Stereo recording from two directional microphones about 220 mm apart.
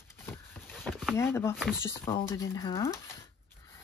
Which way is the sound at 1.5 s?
5° right (ahead or behind).